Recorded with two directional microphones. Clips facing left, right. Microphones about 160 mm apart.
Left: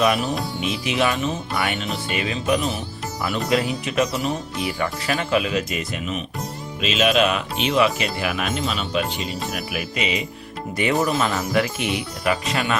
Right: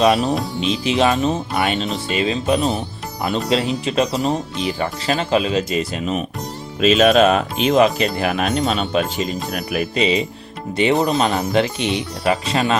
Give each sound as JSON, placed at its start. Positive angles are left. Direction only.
{"t": 0.6, "sound": "speech", "side_deg": -30}
{"t": 6.7, "sound": "speech", "side_deg": -45}
{"t": 8.7, "sound": "speech", "side_deg": -50}
{"t": 9.9, "sound": "speech", "side_deg": -30}